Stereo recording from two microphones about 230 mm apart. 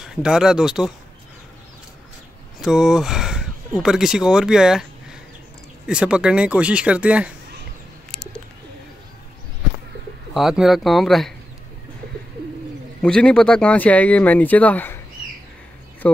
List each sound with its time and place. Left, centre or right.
0.0 s speech: centre
2.6 s speech: centre
5.9 s speech: centre
10.3 s speech: centre
13.0 s speech: centre